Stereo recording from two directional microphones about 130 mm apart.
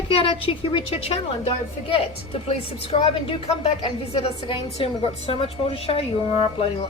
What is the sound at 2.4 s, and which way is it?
Speech, 50° left (ahead or behind).